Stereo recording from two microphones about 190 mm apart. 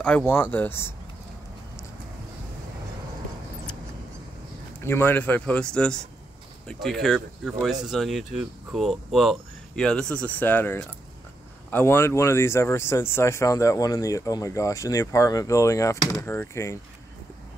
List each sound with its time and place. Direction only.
0.0 s speech: 10° left (ahead or behind)
4.8 s speech: 10° left (ahead or behind)